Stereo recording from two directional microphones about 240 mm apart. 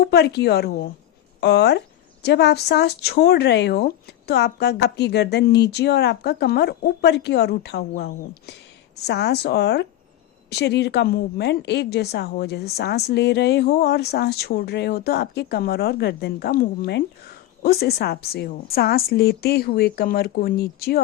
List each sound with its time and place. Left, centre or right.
0.0 s a woman's voice: left